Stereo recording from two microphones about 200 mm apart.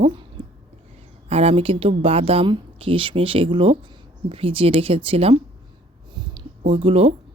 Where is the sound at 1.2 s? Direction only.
30° right (ahead or behind).